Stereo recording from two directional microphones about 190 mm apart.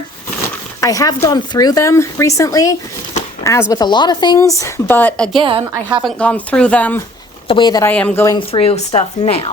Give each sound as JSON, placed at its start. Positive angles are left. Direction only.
{"t": 0.8, "sound": "a woman's voice", "side_deg": 15}
{"t": 5.4, "sound": "a woman's voice", "side_deg": -30}
{"t": 6.0, "sound": "a woman's voice", "side_deg": 5}
{"t": 7.4, "sound": "speech", "side_deg": 25}
{"t": 7.9, "sound": "a woman's voice", "side_deg": 10}
{"t": 8.4, "sound": "speech", "side_deg": 30}